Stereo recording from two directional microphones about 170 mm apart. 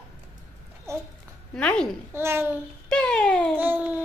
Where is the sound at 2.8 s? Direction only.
5° left (ahead or behind).